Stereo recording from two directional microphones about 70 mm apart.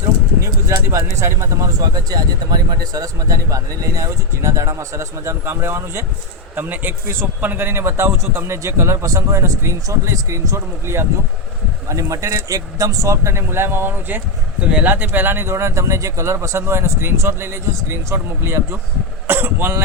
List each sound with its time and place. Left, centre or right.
0.4 s speech: right
1.8 s speech: right
6.6 s speech: right
14.6 s speech: centre
14.8 s speech: right